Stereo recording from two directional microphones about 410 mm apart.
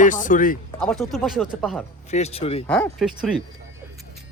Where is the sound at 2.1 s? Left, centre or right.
Centre.